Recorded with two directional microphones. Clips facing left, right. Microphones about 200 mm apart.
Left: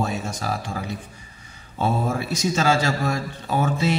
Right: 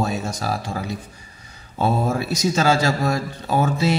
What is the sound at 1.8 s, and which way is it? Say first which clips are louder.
A man's voice: right 2 dB; 40° right (ahead or behind).